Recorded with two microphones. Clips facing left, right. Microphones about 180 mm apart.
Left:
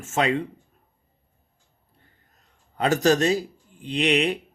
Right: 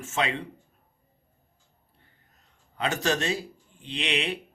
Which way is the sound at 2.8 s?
40° left (ahead or behind).